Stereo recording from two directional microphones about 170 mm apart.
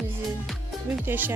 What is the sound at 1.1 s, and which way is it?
Speech, 10° right (ahead or behind).